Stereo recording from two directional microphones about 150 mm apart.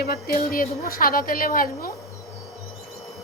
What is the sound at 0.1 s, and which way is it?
A woman's voice, 80° left.